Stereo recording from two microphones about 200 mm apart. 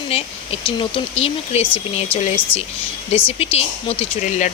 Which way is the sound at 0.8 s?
30° left (ahead or behind).